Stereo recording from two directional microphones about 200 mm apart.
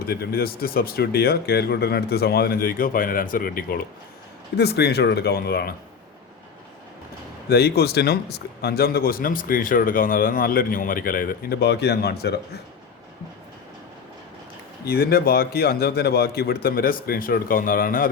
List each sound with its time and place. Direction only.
0.1 s speech: 50° left (ahead or behind)
7.5 s speech: 55° left (ahead or behind)
14.8 s speech: 50° left (ahead or behind)